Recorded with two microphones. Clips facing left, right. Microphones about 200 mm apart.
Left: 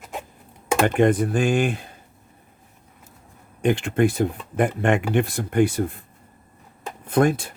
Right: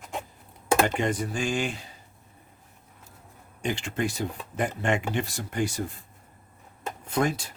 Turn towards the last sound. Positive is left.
turn(degrees=55)  # may be behind; listen again after turning